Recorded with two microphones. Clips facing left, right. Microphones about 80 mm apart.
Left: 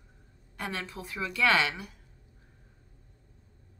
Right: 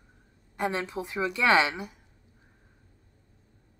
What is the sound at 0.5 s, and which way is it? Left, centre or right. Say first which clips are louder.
Speech: right 7 dB; right.